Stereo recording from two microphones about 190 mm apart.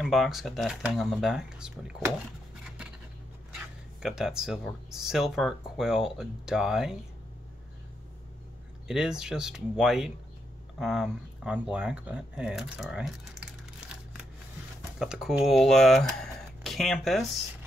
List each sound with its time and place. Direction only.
0.0 s speech: centre (ahead or behind)
3.5 s speech: centre (ahead or behind)
8.8 s speech: 5° right (ahead or behind)
15.0 s speech: 5° right (ahead or behind)